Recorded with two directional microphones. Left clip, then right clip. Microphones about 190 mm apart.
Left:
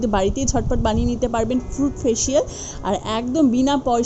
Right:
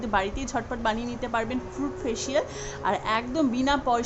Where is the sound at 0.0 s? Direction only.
30° left (ahead or behind).